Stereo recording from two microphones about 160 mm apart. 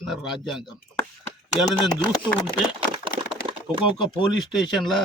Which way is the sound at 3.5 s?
35° right (ahead or behind).